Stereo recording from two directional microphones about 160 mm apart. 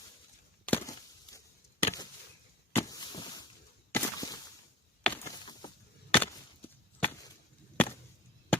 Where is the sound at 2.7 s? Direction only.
20° left (ahead or behind).